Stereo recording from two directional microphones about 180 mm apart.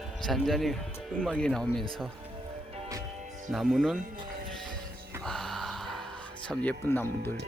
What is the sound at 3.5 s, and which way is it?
Speech, centre (ahead or behind).